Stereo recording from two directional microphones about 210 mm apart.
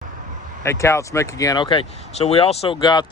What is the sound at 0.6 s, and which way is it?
Speech, 15° left (ahead or behind).